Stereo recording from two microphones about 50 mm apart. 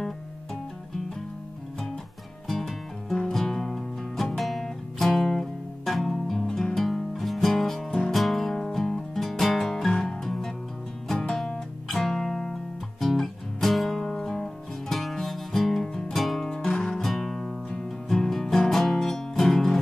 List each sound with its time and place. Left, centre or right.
2.4 s music: centre
11.9 s music: centre